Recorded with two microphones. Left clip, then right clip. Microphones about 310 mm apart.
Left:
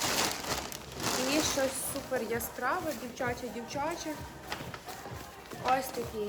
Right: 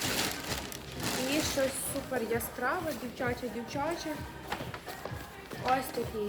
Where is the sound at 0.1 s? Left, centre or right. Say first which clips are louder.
Left 2 dB; centre.